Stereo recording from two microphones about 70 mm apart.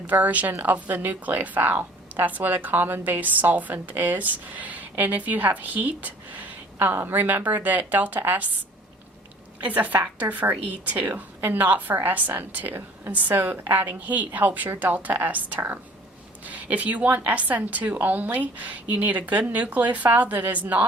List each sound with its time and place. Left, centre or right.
0.1 s a woman's voice: right
9.6 s a woman's voice: right